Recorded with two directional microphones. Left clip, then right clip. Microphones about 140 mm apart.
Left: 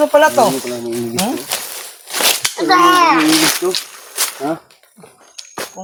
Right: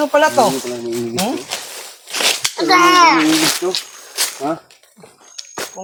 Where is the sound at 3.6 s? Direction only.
15° left (ahead or behind).